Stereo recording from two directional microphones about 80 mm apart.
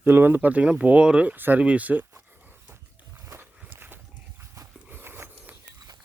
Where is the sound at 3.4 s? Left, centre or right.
Right.